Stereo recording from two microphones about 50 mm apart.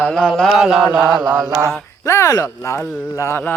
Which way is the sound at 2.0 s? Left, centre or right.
Left.